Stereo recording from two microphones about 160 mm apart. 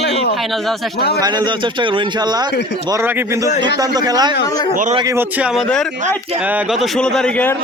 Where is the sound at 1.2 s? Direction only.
25° right (ahead or behind).